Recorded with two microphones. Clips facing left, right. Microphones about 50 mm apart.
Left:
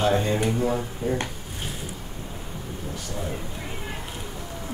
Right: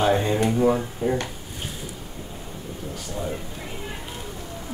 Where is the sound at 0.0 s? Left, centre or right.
Centre.